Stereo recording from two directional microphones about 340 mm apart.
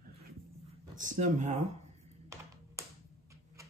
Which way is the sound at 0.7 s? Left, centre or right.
Right.